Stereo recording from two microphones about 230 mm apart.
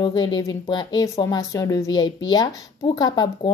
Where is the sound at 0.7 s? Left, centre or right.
Centre.